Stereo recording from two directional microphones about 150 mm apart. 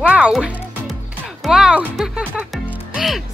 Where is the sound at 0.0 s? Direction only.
10° right (ahead or behind).